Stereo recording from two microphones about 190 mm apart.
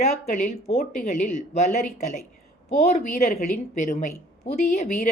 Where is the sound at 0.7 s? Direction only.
50° left (ahead or behind).